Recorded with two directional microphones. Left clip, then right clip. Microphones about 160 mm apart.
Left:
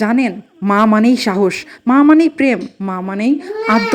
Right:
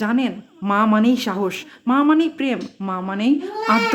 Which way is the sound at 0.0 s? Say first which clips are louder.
Left 6 dB; 30° left (ahead or behind).